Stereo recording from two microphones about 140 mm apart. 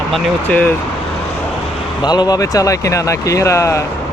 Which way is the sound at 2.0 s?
30° left (ahead or behind).